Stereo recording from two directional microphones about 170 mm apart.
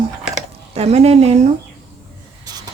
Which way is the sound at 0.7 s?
40° right (ahead or behind).